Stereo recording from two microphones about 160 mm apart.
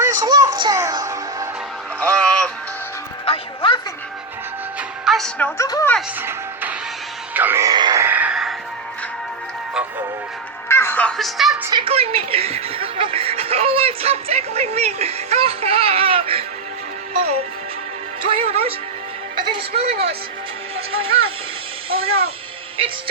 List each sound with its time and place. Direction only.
0.0 s music: 25° right (ahead or behind)
2.0 s a sound: 5° left (ahead or behind)
3.2 s music: 35° left (ahead or behind)
4.8 s music: centre (ahead or behind)
5.5 s speech: 20° left (ahead or behind)
6.1 s music: 10° right (ahead or behind)
7.3 s a sound: 15° right (ahead or behind)
8.0 s music: 10° right (ahead or behind)
10.7 s music: 15° left (ahead or behind)
11.2 s a woman's voice: centre (ahead or behind)
11.7 s speech: 35° right (ahead or behind)
18.2 s speech: 35° right (ahead or behind)